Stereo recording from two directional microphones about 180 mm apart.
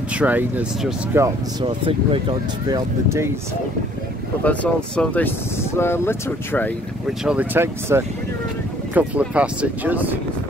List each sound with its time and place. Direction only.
0.1 s speech: 10° right (ahead or behind)
1.6 s speech: 30° right (ahead or behind)
4.5 s speech: 5° left (ahead or behind)
7.1 s speech: 5° right (ahead or behind)